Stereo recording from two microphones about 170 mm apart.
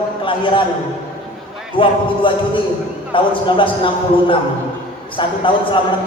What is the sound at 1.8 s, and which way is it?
Speech, 30° left (ahead or behind).